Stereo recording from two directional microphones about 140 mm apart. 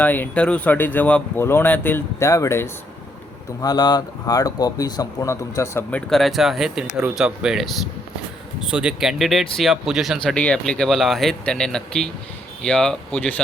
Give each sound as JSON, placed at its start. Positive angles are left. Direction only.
{"t": 0.0, "sound": "speech", "side_deg": 10}
{"t": 5.9, "sound": "speech", "side_deg": 0}